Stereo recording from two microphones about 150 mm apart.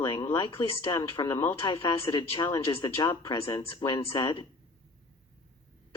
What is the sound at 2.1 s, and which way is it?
Speech, 30° left (ahead or behind).